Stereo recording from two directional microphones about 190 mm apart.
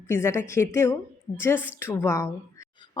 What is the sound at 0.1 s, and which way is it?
A woman's voice, 15° left (ahead or behind).